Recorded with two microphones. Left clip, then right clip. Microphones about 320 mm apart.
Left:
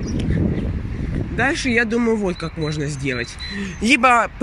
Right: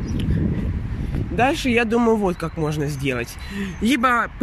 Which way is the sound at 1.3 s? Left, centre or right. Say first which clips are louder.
Even; centre.